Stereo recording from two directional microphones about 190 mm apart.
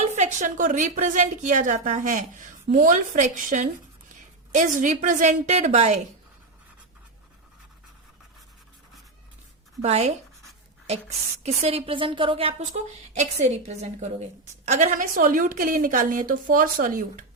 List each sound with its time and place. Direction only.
0.0 s a woman's voice: 35° right (ahead or behind)
9.8 s a woman's voice: 35° right (ahead or behind)
11.4 s a woman's voice: 30° right (ahead or behind); by 17.2 s 45° right (ahead or behind)